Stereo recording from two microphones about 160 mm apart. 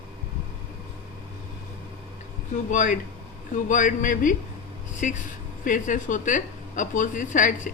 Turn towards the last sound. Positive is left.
turn(degrees=55)  # may be behind; listen again after turning